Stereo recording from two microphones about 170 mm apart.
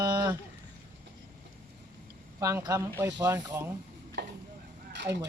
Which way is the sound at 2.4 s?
20° right (ahead or behind).